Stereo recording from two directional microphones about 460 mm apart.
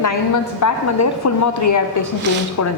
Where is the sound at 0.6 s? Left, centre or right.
Left.